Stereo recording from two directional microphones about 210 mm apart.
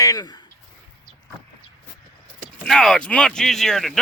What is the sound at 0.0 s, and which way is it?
Speech, 15° left (ahead or behind).